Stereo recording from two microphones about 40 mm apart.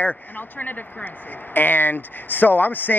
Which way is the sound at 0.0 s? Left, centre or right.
Left.